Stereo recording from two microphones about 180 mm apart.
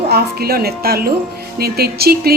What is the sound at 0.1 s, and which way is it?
A woman's voice, 60° right (ahead or behind).